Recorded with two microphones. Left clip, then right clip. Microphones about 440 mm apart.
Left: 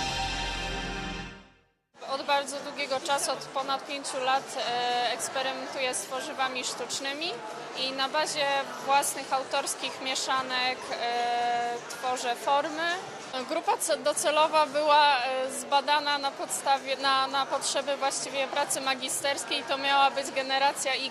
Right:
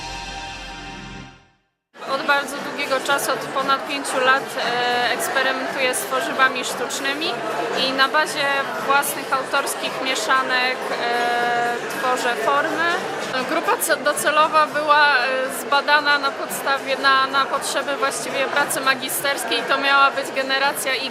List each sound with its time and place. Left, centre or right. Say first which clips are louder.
2.1 s chatter: right 8 dB; left
2.9 s a woman's voice: right 9 dB; left